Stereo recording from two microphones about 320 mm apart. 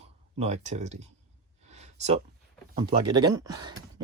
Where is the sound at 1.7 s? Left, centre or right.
Right.